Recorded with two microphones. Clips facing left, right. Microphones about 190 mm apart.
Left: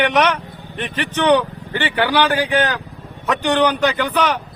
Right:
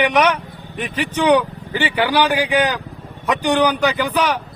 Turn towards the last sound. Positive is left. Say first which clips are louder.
# even
turn(degrees=-10)  # may be behind; listen again after turning